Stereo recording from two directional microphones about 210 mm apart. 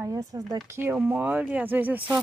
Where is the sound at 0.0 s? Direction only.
15° right (ahead or behind).